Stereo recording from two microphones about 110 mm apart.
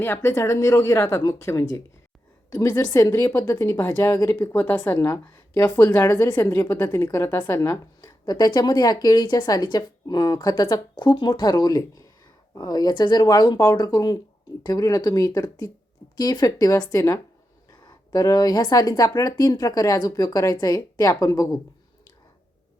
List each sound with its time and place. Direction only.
0.0 s a woman's voice: 20° left (ahead or behind)